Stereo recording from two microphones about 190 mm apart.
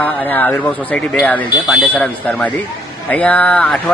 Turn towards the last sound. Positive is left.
turn(degrees=5)  # may be behind; listen again after turning